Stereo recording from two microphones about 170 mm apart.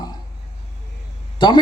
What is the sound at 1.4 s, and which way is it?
Speech, 25° left (ahead or behind).